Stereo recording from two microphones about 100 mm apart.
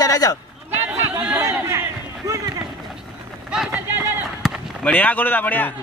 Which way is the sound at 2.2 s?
35° right (ahead or behind).